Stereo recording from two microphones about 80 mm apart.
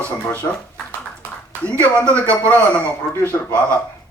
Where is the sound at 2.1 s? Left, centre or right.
Centre.